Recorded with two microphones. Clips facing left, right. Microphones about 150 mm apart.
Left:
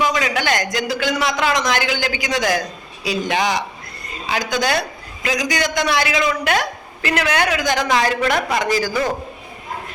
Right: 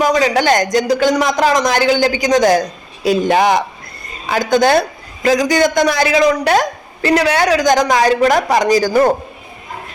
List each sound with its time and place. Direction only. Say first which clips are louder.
0.0 s a man's voice: right 7 dB; 40° right (ahead or behind)